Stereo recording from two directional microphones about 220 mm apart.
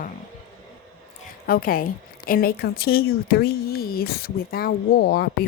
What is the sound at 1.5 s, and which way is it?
A woman's voice, 40° left (ahead or behind).